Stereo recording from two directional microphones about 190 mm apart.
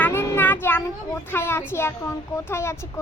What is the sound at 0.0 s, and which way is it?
Child singing, 10° left (ahead or behind).